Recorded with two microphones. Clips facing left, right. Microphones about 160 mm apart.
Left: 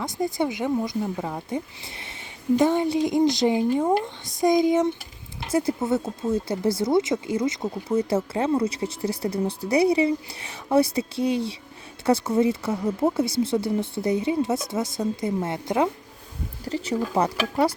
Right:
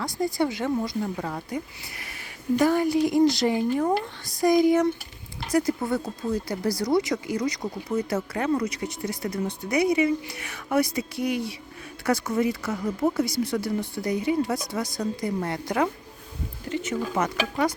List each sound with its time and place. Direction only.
0.0 s speech: 20° left (ahead or behind)
16.6 s speech: 35° left (ahead or behind)